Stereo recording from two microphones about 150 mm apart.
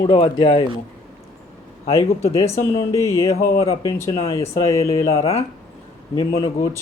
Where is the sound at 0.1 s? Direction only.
35° left (ahead or behind).